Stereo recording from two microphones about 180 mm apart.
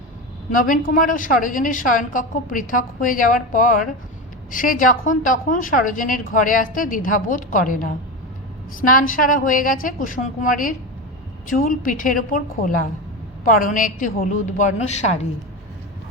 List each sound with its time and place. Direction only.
0.5 s a woman's voice: 50° left (ahead or behind)